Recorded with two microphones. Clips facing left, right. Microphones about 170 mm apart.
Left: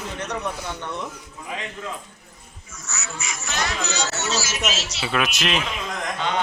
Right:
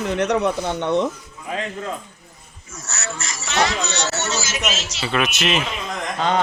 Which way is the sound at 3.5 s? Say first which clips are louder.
Right 7 dB; 80° right.